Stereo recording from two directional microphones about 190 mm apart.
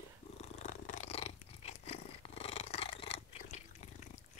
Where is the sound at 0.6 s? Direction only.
35° left (ahead or behind).